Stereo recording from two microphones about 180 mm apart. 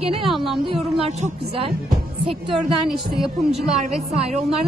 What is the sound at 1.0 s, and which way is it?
Speech, 35° right (ahead or behind).